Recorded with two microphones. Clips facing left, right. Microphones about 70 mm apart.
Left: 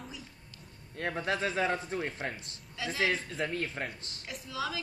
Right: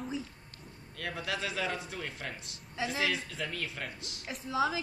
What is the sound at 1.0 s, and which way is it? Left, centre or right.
A man's voice, left.